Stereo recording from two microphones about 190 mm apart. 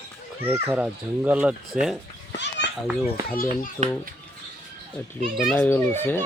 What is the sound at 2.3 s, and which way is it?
Children playing, 65° left (ahead or behind).